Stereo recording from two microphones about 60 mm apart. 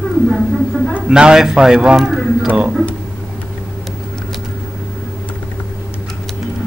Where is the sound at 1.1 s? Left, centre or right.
Centre.